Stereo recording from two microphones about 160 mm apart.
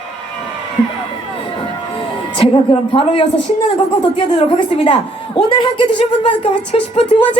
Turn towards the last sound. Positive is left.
turn(degrees=35)  # may be behind; listen again after turning